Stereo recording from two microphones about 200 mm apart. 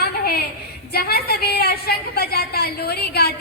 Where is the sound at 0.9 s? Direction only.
50° left (ahead or behind).